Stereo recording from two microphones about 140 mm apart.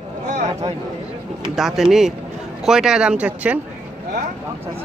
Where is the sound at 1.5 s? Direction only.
5° right (ahead or behind).